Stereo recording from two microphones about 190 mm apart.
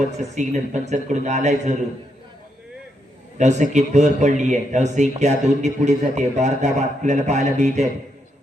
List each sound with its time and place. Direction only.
0.0 s speech: 35° right (ahead or behind)
3.3 s speech: 40° right (ahead or behind)